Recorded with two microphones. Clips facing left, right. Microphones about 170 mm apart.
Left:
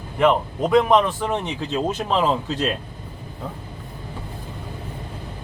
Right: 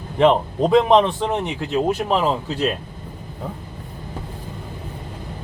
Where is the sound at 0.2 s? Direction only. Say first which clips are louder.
Right 3 dB; 25° right (ahead or behind).